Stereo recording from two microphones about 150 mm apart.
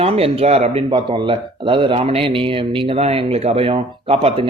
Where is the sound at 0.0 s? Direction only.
40° right (ahead or behind).